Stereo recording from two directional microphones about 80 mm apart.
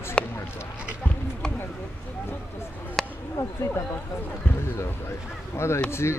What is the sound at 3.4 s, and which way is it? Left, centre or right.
Speech, left.